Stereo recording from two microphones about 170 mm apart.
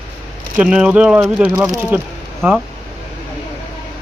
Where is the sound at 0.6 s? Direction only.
5° right (ahead or behind).